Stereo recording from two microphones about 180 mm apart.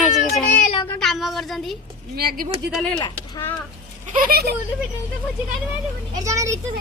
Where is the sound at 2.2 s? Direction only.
60° right (ahead or behind).